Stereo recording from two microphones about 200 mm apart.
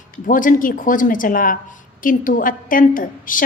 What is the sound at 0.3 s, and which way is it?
A woman's voice, 40° left (ahead or behind).